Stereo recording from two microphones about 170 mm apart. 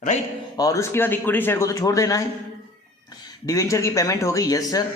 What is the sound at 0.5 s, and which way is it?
A man's voice, 20° left (ahead or behind).